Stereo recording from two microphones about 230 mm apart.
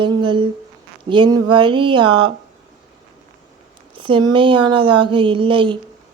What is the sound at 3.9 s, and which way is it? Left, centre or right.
Speech, right.